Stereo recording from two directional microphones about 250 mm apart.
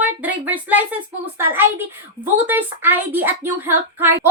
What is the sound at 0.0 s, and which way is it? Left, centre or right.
Speech, centre.